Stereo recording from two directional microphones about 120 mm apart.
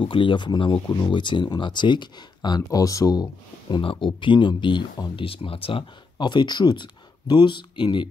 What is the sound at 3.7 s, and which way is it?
Speech, 45° left (ahead or behind).